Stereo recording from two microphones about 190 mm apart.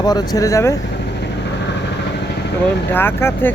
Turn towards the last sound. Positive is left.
turn(degrees=10)  # may be behind; listen again after turning